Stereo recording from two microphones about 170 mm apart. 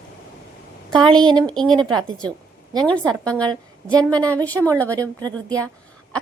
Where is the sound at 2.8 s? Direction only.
5° left (ahead or behind).